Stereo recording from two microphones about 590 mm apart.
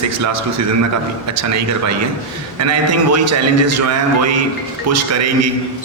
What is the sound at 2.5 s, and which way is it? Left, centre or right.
A man's voice, right.